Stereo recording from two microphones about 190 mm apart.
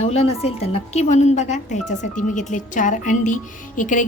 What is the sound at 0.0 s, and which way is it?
A woman's voice, 35° left (ahead or behind).